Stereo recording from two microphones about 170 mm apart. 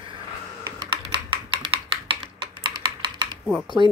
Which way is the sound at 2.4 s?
30° right (ahead or behind).